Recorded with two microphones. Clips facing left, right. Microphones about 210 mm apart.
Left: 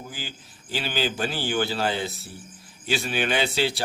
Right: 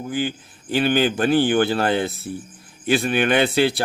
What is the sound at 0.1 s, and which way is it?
Speech, 55° right (ahead or behind).